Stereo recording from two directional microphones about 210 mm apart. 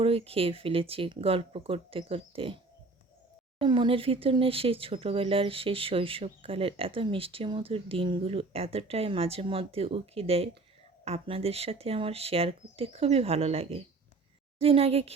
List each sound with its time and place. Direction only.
0.0 s speech: 25° right (ahead or behind)
3.6 s speech: 25° right (ahead or behind)